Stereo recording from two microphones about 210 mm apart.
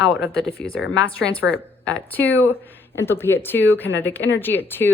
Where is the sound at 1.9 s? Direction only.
5° left (ahead or behind).